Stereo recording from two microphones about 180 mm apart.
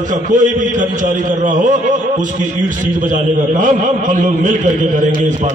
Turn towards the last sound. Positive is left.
turn(degrees=-45)  # may be behind; listen again after turning